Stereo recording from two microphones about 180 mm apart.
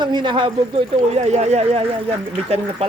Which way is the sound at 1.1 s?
35° right (ahead or behind).